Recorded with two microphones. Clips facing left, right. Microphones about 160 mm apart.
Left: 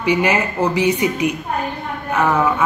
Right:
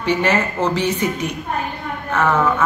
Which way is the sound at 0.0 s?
10° left (ahead or behind).